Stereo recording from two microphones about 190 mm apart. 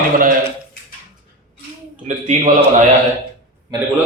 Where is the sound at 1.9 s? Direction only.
40° right (ahead or behind).